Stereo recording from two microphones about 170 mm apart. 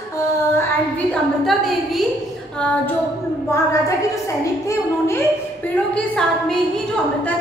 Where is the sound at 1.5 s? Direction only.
Centre (ahead or behind).